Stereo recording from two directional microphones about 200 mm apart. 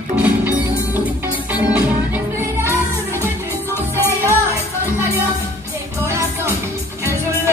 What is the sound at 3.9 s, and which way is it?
Music, 10° left (ahead or behind).